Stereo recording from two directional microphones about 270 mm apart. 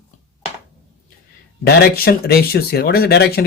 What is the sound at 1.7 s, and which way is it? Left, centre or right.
Speech, left.